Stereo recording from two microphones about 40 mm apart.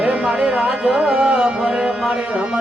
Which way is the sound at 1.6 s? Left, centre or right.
Right.